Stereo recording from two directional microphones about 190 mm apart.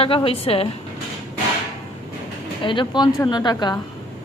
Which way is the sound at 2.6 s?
25° left (ahead or behind).